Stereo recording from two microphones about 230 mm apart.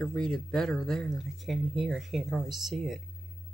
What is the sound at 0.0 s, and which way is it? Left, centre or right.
Speech, centre.